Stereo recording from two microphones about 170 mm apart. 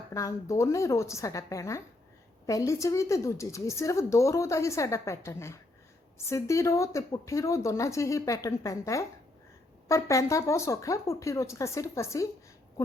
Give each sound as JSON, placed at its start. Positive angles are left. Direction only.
{"t": 0.1, "sound": "speech", "side_deg": 20}